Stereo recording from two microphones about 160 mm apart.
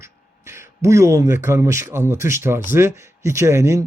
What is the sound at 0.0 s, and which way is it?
Speech, 15° right (ahead or behind).